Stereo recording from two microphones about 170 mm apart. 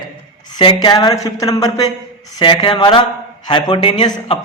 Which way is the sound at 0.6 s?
25° left (ahead or behind).